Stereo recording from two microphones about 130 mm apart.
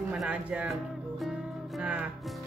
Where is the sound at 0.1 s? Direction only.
10° right (ahead or behind).